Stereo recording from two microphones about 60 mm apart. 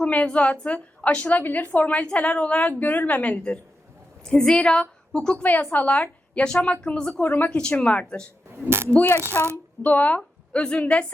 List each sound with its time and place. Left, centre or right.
0.0 s a woman's voice: left
5.4 s a woman's voice: left; by 7.1 s centre
7.2 s speech: left
7.5 s a woman's voice: centre
8.5 s speech: right
8.9 s a woman's voice: left
9.4 s a woman's voice: left
9.8 s a woman's voice: left
10.2 s a woman's voice: centre